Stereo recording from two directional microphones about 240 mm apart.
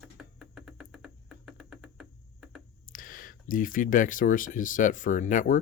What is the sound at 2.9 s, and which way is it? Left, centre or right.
Speech, left.